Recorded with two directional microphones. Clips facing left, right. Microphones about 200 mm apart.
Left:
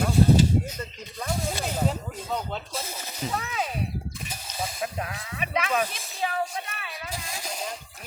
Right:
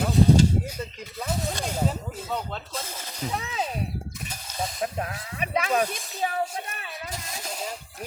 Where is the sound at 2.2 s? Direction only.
5° right (ahead or behind).